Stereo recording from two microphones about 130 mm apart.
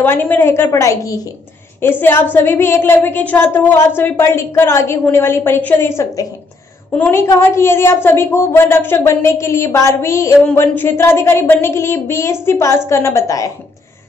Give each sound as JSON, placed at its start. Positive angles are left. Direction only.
{"t": 0.0, "sound": "a woman's voice", "side_deg": 15}